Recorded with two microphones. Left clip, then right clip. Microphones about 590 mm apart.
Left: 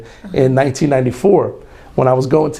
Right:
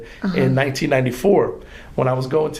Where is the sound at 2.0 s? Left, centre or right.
Left.